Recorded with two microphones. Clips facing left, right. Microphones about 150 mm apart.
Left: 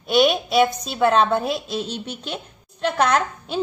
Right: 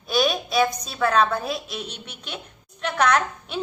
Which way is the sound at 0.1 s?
25° left (ahead or behind).